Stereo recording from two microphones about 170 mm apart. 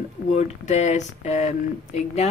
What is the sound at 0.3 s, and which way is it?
Speech, 40° left (ahead or behind).